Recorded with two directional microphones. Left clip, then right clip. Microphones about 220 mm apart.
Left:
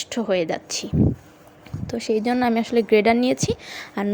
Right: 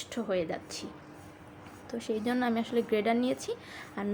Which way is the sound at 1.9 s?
35° left (ahead or behind).